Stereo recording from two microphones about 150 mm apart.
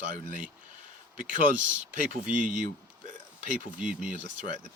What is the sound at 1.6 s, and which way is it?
Speech, 10° right (ahead or behind).